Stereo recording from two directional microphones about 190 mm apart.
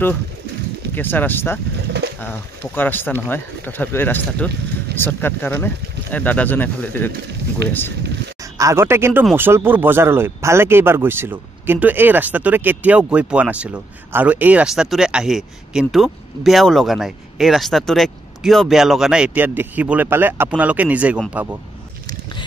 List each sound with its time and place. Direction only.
0.9 s speech: 10° left (ahead or behind)
8.5 s speech: 15° right (ahead or behind)